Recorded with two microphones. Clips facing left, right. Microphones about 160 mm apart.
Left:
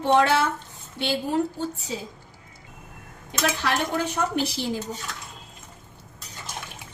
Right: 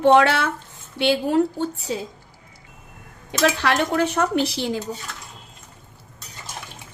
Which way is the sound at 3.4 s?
75° right (ahead or behind).